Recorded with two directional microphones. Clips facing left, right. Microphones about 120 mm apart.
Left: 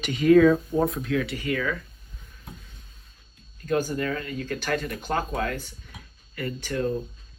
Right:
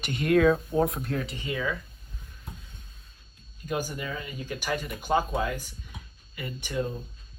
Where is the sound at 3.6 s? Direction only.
10° right (ahead or behind).